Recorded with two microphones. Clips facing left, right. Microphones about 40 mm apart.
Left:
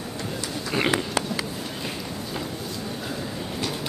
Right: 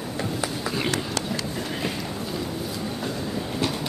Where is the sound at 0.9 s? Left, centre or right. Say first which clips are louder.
Left 2 dB; centre.